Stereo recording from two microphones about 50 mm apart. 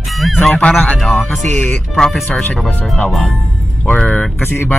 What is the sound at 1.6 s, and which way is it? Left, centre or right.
Speech, centre.